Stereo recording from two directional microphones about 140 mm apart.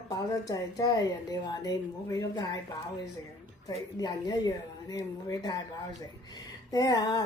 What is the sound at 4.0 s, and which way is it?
A woman's voice, 30° left (ahead or behind).